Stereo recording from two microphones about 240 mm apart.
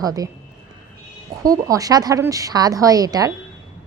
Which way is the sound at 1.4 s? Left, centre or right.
Centre.